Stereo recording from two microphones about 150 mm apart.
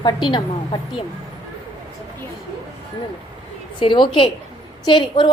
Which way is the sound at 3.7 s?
30° left (ahead or behind).